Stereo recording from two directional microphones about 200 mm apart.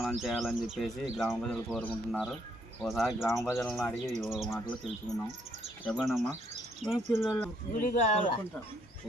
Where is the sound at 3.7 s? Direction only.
Centre (ahead or behind).